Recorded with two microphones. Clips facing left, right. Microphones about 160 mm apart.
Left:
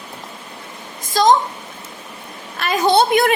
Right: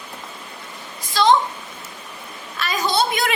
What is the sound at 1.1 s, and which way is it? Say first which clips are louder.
Speech: left 2 dB; 40° left (ahead or behind).